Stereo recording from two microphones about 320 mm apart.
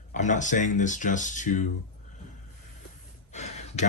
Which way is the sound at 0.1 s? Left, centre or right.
Left.